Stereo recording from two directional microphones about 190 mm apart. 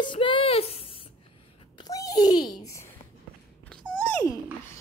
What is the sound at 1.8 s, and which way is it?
A child's voice, 20° left (ahead or behind).